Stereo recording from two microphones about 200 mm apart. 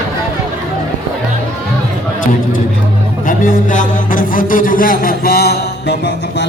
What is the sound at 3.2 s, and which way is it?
A man's voice, 40° left (ahead or behind).